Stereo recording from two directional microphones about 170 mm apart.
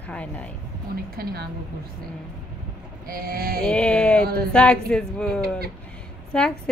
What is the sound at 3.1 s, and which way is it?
Speech, 60° right (ahead or behind).